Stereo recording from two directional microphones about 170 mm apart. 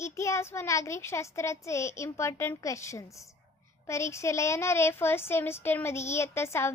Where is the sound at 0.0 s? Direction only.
15° left (ahead or behind).